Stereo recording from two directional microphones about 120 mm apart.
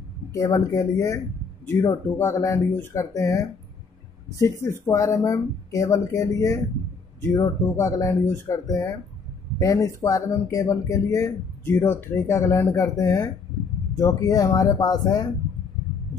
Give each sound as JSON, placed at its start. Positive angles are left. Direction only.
{"t": 0.3, "sound": "speech", "side_deg": 30}